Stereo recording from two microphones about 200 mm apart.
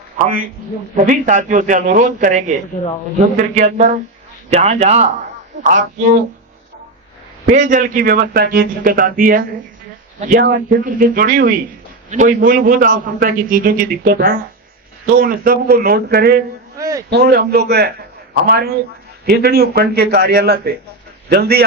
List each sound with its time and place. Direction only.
0.2 s a man's voice: 40° right (ahead or behind)
7.4 s a man's voice: 40° right (ahead or behind)
16.7 s a sound: 15° right (ahead or behind)
17.1 s a man's voice: 55° right (ahead or behind)